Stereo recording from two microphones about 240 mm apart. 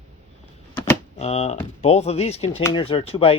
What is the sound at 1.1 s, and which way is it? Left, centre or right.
Speech, left.